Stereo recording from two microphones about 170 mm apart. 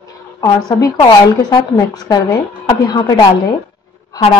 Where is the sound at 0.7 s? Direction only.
20° left (ahead or behind).